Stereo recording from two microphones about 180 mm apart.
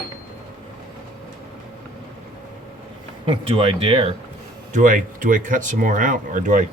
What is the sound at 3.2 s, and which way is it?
Speech, 30° right (ahead or behind).